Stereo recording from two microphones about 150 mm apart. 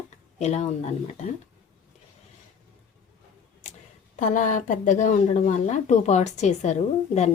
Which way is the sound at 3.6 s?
55° left (ahead or behind).